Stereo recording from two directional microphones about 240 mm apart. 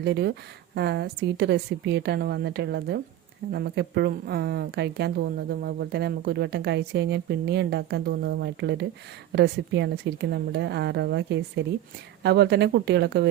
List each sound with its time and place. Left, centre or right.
0.0 s a woman's voice: right